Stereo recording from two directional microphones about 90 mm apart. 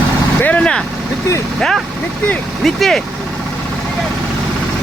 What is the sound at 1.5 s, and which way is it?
Speech, 5° left (ahead or behind).